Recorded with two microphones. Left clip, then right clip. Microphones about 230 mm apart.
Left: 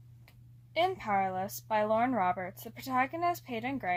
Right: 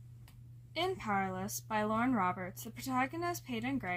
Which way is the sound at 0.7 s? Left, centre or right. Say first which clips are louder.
Left 5 dB; right.